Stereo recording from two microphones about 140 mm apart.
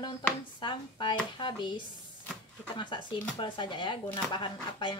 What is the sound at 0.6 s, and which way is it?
Speech, 35° left (ahead or behind).